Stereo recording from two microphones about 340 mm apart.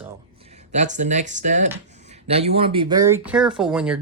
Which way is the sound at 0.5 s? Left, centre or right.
Centre.